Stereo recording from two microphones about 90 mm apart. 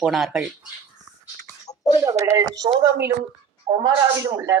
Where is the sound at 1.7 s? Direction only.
45° left (ahead or behind).